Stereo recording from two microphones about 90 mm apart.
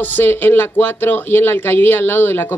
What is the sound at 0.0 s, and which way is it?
Speech, 25° left (ahead or behind).